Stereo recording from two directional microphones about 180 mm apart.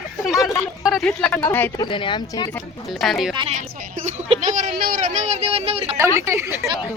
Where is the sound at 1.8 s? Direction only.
30° left (ahead or behind).